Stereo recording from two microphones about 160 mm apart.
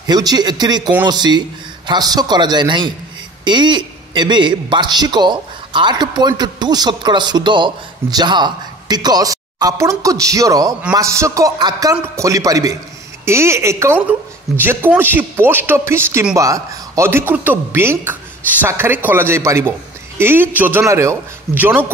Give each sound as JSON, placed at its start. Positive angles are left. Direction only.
{"t": 0.0, "sound": "a man's voice", "side_deg": -25}